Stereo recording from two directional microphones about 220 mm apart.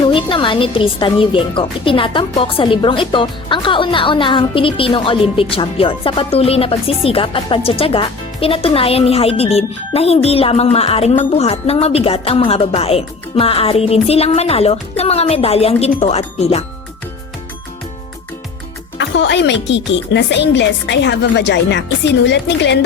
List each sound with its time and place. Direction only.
0.0 s speech: 25° left (ahead or behind)
18.9 s a woman's voice: 55° left (ahead or behind)